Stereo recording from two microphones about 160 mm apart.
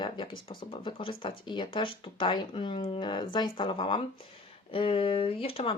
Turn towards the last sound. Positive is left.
turn(degrees=35)  # may be behind; listen again after turning